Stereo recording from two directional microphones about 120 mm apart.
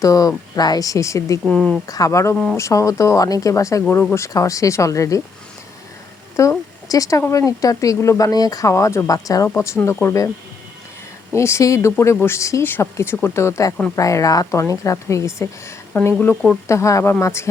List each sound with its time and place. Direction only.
0.0 s speech: 30° left (ahead or behind)
1.5 s speech: 5° left (ahead or behind)
1.9 s speech: 25° left (ahead or behind)
2.3 s speech: 5° left (ahead or behind)
2.6 s speech: 25° left (ahead or behind)
6.4 s speech: 25° left (ahead or behind)
11.3 s speech: 25° left (ahead or behind)
15.9 s speech: 10° left (ahead or behind)
16.6 s speech: 25° left (ahead or behind)